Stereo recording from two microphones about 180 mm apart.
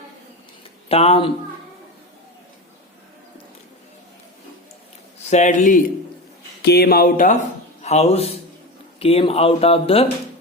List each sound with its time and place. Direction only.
0.9 s speech: 35° left (ahead or behind)
5.3 s a man's voice: 40° left (ahead or behind)
6.6 s music: 65° left (ahead or behind)
7.8 s a man's voice: 35° left (ahead or behind)